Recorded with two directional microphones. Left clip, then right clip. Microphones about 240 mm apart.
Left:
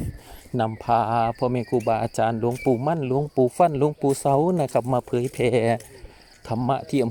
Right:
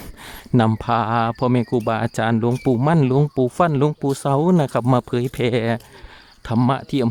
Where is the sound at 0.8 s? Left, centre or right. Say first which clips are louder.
Right 1 dB; centre.